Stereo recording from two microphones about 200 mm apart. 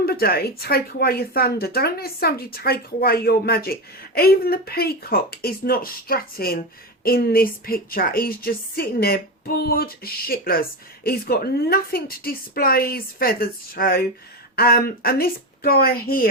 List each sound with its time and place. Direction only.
0.0 s a woman's voice: 50° left (ahead or behind)